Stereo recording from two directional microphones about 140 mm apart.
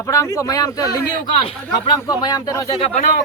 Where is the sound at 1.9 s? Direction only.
30° left (ahead or behind).